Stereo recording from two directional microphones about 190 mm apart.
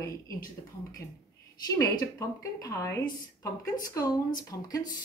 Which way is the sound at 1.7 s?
20° left (ahead or behind).